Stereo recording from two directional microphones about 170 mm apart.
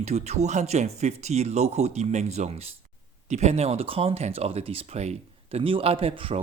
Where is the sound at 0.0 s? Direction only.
40° right (ahead or behind).